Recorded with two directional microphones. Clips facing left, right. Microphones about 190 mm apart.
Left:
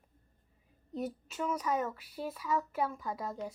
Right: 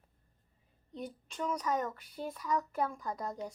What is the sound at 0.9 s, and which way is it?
A woman's voice, 5° left (ahead or behind).